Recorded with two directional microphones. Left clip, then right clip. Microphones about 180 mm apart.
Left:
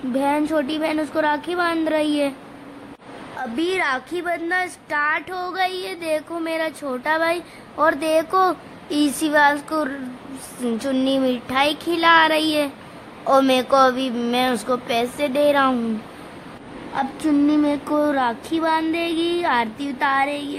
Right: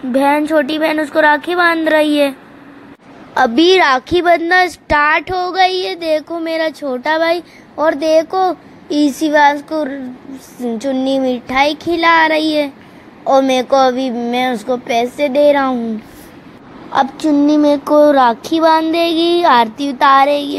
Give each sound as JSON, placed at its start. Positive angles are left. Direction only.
{"t": 0.1, "sound": "speech", "side_deg": -15}
{"t": 3.5, "sound": "speech", "side_deg": -35}
{"t": 16.9, "sound": "child singing", "side_deg": -30}